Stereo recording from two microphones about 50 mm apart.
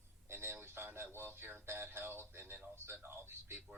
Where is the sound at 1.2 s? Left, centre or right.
Right.